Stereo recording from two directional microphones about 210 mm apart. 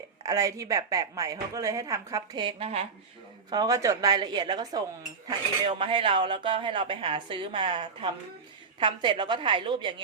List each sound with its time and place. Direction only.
0.2 s a woman's voice: 15° right (ahead or behind)